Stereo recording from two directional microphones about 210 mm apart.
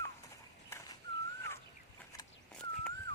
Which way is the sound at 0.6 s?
15° left (ahead or behind).